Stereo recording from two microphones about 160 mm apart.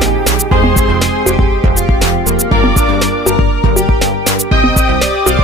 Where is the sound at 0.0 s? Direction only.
Centre (ahead or behind).